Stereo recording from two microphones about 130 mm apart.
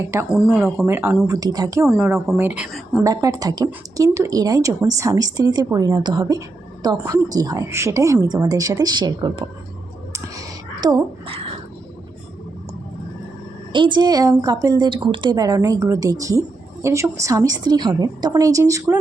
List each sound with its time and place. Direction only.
0.3 s speech: centre (ahead or behind)
0.9 s speech: 15° right (ahead or behind)
1.3 s a woman's voice: 30° right (ahead or behind)
2.1 s speech: centre (ahead or behind)
2.4 s speech: 10° right (ahead or behind)
3.0 s a woman's voice: 25° right (ahead or behind)
10.1 s a sound: 30° right (ahead or behind)
13.7 s a woman's voice: 35° right (ahead or behind)